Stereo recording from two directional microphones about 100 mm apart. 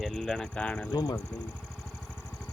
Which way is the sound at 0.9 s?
45° left (ahead or behind).